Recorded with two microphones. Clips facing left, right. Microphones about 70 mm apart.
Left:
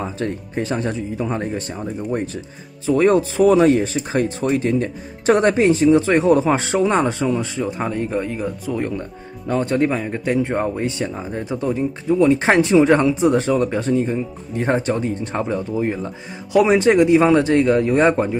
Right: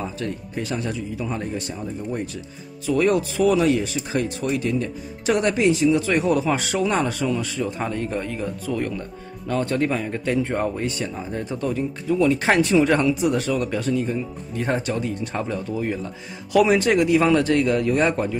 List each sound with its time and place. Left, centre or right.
0.0 s speech: left
2.9 s speech: left